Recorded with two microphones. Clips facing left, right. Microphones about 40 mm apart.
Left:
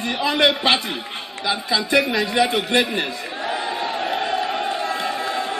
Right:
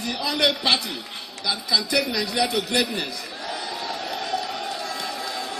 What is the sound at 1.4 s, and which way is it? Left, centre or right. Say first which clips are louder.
A man's voice: left 3 dB; left.